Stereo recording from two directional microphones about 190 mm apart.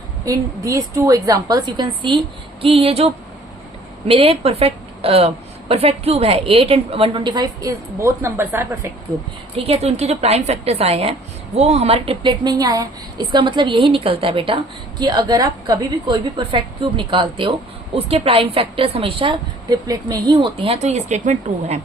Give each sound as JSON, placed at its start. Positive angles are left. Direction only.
{"t": 0.3, "sound": "a woman's voice", "side_deg": -15}
{"t": 4.1, "sound": "a woman's voice", "side_deg": -30}
{"t": 9.6, "sound": "a woman's voice", "side_deg": -35}